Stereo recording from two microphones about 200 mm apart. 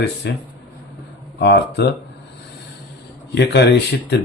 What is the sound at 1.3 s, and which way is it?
Speech, 55° left (ahead or behind).